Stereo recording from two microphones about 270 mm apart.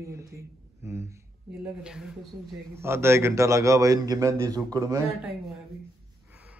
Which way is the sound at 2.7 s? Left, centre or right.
Centre.